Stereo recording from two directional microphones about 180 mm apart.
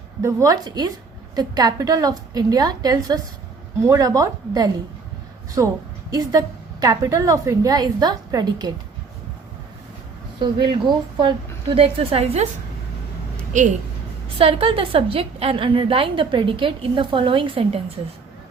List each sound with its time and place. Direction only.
0.2 s a woman's voice: 15° right (ahead or behind)
6.1 s a woman's voice: 20° right (ahead or behind)
10.4 s a woman's voice: 25° right (ahead or behind)
13.5 s a woman's voice: 45° right (ahead or behind)
14.3 s a woman's voice: 30° right (ahead or behind)